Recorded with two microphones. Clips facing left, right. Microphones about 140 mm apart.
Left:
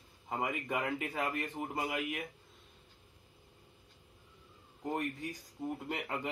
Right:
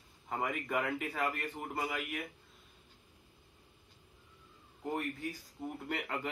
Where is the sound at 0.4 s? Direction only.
15° left (ahead or behind).